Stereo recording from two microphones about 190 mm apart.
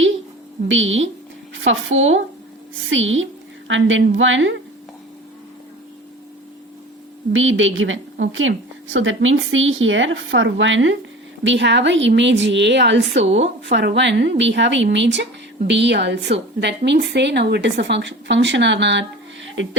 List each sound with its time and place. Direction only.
0.7 s a woman's voice: 90° right
7.3 s a woman's voice: 90° right
11.4 s a woman's voice: 70° right (ahead or behind)